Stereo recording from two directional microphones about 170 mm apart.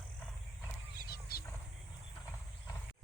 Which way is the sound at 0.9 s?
65° left (ahead or behind).